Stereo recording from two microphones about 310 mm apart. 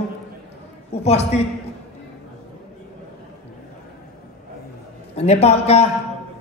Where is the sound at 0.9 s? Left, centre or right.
Left.